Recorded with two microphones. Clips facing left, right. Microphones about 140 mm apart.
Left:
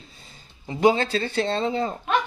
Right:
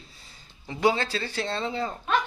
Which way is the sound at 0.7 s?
20° left (ahead or behind).